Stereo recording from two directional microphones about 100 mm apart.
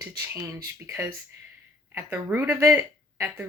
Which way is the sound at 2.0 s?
20° right (ahead or behind).